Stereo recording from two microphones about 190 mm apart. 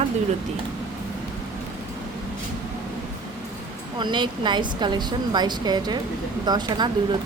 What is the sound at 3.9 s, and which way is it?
A woman's voice, 25° right (ahead or behind).